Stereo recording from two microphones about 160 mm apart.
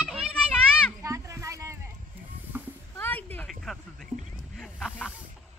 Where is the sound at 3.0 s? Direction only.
10° left (ahead or behind).